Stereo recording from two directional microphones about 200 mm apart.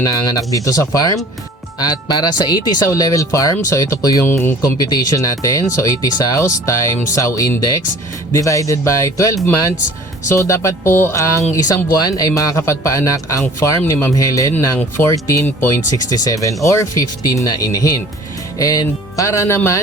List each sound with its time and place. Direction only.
0.0 s speech: 15° left (ahead or behind)